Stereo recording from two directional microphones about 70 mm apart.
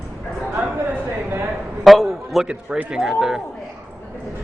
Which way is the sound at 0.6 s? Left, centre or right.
Right.